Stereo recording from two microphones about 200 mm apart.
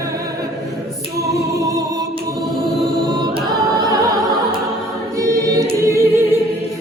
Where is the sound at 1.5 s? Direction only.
15° right (ahead or behind).